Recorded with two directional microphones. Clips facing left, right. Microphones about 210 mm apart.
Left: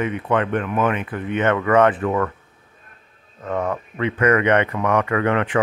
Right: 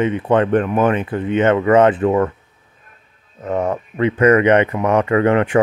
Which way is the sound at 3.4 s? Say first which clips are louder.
Right 4 dB; 25° right (ahead or behind).